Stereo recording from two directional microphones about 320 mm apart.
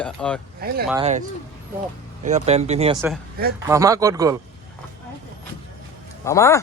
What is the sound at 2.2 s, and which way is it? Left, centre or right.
Speech, right.